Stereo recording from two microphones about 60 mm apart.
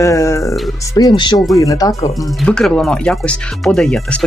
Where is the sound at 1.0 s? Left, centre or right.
Left.